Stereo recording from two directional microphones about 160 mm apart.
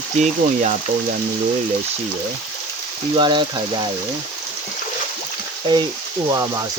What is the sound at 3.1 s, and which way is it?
Speech, 30° right (ahead or behind).